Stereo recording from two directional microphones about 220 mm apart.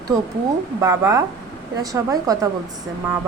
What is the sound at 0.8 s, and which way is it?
A woman's voice, 15° right (ahead or behind).